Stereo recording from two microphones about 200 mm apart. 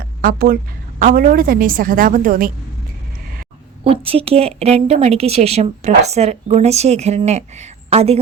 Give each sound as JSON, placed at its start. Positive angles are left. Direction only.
{"t": 0.2, "sound": "a woman's voice", "side_deg": -45}
{"t": 3.8, "sound": "a woman's voice", "side_deg": -30}